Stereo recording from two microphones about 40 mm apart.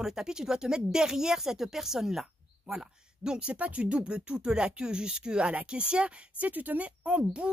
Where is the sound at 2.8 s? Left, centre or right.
Right.